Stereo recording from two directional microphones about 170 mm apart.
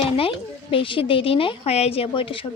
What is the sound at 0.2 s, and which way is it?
A woman's voice, 30° left (ahead or behind).